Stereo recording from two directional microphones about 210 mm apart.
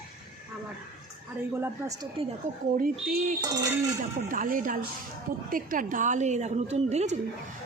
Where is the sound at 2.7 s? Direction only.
40° right (ahead or behind).